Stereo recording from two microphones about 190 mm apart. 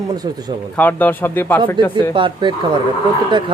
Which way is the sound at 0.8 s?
10° left (ahead or behind).